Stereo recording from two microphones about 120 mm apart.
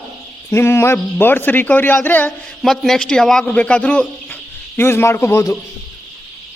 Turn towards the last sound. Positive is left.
turn(degrees=20)  # may be behind; listen again after turning